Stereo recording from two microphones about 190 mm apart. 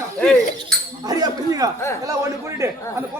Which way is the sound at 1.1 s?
20° right (ahead or behind).